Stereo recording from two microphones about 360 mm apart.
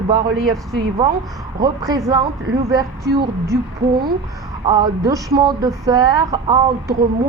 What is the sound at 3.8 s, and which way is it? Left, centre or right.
Speech, right.